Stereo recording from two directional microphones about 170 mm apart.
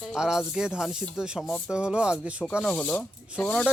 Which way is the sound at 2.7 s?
10° left (ahead or behind).